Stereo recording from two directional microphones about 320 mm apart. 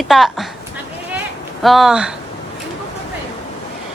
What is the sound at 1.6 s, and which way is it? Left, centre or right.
Speech, centre.